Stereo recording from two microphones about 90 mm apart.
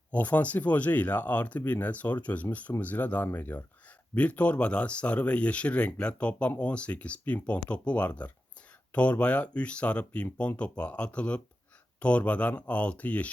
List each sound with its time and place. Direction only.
0.1 s speech: 15° left (ahead or behind)